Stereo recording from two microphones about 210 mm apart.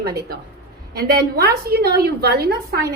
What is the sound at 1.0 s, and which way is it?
A woman's voice, 45° right (ahead or behind).